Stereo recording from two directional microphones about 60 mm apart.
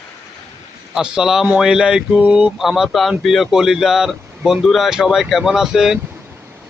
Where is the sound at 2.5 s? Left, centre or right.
Centre.